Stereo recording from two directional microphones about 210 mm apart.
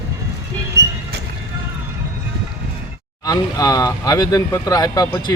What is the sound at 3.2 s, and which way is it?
Speech, 15° left (ahead or behind).